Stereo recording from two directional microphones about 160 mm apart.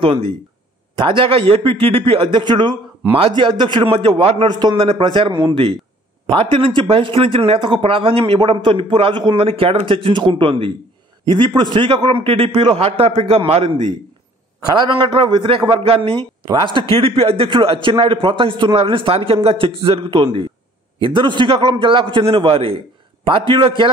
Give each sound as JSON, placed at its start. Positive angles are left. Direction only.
{"t": 0.0, "sound": "speech", "side_deg": -35}